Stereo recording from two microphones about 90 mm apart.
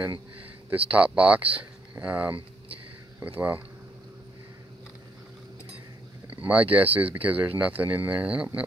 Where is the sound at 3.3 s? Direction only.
20° right (ahead or behind).